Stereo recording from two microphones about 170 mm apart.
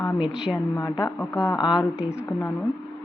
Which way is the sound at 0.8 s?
25° left (ahead or behind).